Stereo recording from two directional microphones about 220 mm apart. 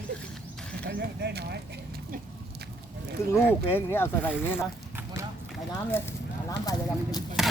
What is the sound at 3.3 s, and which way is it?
Speech, 10° left (ahead or behind).